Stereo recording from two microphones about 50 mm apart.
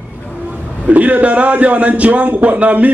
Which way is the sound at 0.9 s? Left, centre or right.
Right.